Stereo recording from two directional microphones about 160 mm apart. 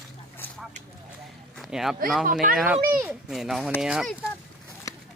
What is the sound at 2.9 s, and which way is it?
Speech, 15° right (ahead or behind).